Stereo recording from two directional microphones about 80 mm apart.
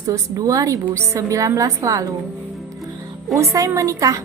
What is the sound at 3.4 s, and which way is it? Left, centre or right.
Speech, right.